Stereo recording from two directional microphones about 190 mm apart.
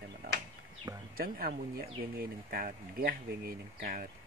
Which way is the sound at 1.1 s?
50° right (ahead or behind).